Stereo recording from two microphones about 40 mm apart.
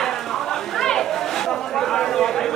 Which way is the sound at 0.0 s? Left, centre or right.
Centre.